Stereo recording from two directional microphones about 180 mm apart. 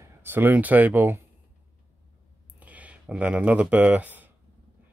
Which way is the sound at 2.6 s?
10° right (ahead or behind).